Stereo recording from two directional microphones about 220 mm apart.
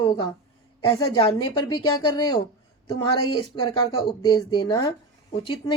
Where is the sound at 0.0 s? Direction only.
20° left (ahead or behind).